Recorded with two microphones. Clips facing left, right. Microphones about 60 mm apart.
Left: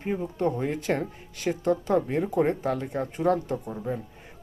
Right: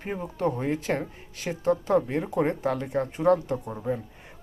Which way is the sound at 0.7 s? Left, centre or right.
Right.